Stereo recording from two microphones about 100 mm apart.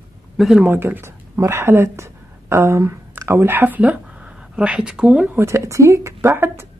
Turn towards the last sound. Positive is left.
turn(degrees=-25)  # may be behind; listen again after turning